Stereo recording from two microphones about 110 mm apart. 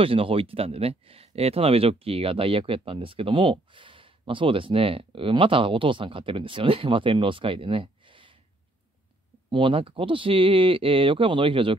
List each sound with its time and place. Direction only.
0.0 s speech: 55° right (ahead or behind)
9.5 s speech: 50° right (ahead or behind)